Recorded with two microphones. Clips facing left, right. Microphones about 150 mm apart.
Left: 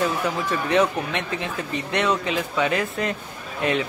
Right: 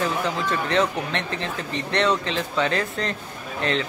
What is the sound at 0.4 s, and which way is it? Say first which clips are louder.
Speech: left 3 dB; 10° left (ahead or behind).